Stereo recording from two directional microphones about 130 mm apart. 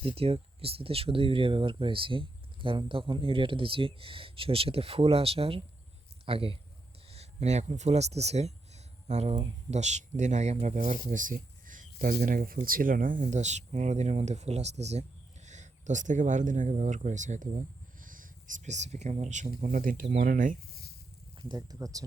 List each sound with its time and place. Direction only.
0.0 s speech: 50° right (ahead or behind)
7.1 s speech: 55° right (ahead or behind)
9.3 s speech: 40° right (ahead or behind)
9.7 s speech: 65° right (ahead or behind)
18.0 s speech: 90° right
21.3 s speech: 30° right (ahead or behind)